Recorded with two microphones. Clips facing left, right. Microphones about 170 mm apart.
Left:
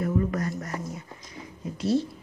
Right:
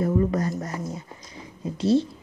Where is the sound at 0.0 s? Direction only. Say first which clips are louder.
Right 4 dB; 30° right (ahead or behind).